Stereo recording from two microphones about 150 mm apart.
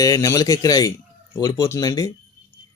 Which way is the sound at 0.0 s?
20° left (ahead or behind).